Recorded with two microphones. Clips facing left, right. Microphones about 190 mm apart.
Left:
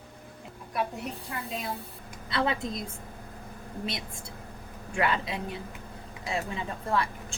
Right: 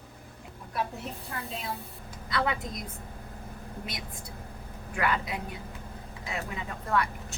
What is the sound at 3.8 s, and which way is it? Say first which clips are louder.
Speech: left 4 dB; 25° left (ahead or behind).